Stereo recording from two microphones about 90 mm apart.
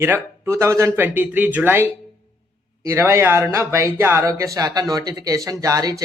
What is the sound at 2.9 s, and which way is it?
Speech, 30° right (ahead or behind).